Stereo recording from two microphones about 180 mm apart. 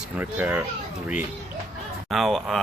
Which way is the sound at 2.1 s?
Centre (ahead or behind).